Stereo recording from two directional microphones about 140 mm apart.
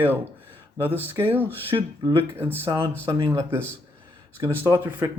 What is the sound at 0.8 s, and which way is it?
Speech, 15° right (ahead or behind).